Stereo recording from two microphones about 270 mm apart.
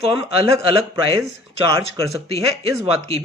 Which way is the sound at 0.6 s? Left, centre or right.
Centre.